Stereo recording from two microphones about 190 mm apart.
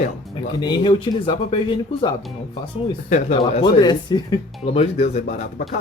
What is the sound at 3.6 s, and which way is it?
Speech, 20° left (ahead or behind).